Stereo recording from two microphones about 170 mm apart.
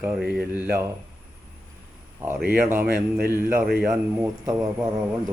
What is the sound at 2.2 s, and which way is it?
Speech, 15° right (ahead or behind).